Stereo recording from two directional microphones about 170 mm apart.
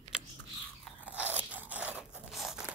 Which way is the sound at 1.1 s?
10° right (ahead or behind).